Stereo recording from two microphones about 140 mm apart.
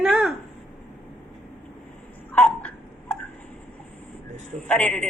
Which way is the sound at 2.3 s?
10° left (ahead or behind).